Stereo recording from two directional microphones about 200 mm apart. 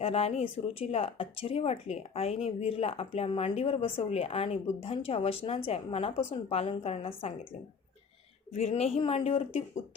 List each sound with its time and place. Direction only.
0.0 s speech: 30° left (ahead or behind)
8.5 s speech: 30° left (ahead or behind)